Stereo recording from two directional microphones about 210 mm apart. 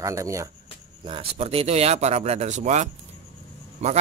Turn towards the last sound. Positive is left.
turn(degrees=-35)  # may be behind; listen again after turning